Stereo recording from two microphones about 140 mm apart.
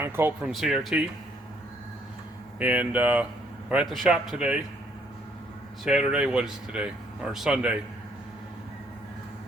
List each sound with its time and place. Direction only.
0.0 s speech: 15° right (ahead or behind)
0.5 s a man's voice: centre (ahead or behind)
2.6 s a man's voice: 10° right (ahead or behind)
5.8 s speech: 5° right (ahead or behind)